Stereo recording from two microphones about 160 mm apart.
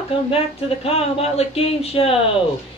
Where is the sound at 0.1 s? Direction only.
35° left (ahead or behind).